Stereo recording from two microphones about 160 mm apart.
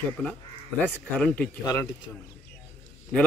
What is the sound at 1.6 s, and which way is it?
Speech, 20° left (ahead or behind).